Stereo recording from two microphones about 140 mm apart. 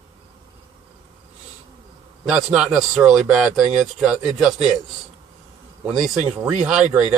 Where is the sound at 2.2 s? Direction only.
5° right (ahead or behind).